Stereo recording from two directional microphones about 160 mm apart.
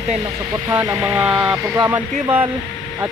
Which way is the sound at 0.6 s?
15° right (ahead or behind).